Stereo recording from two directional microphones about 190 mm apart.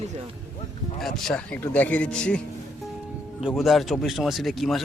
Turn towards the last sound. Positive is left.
turn(degrees=0)  # may be behind; listen again after turning